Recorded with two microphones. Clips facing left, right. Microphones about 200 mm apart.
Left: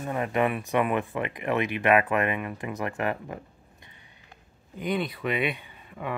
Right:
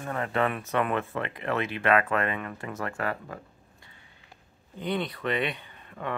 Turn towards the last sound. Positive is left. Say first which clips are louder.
# even
turn(degrees=10)  # may be behind; listen again after turning